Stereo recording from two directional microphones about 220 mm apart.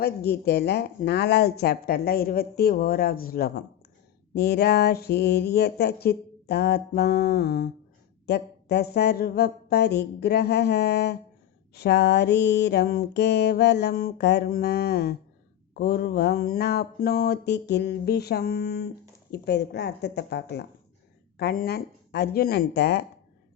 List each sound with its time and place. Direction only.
0.0 s speech: 45° left (ahead or behind)